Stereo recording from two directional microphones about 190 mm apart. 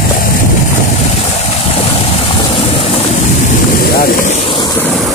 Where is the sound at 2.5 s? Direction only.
30° left (ahead or behind).